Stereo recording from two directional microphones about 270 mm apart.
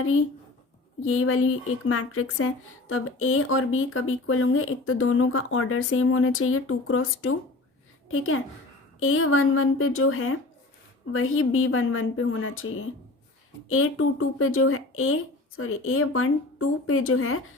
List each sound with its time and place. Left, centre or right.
0.0 s a woman's voice: left